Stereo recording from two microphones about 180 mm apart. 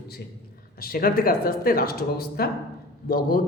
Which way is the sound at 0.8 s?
55° left (ahead or behind).